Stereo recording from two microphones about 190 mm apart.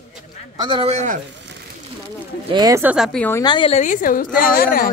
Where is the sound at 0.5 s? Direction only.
25° right (ahead or behind).